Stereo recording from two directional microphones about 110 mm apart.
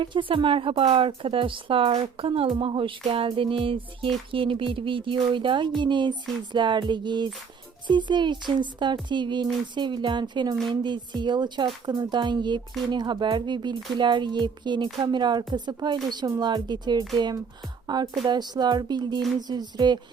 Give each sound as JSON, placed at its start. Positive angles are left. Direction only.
{"t": 0.0, "sound": "speech", "side_deg": -50}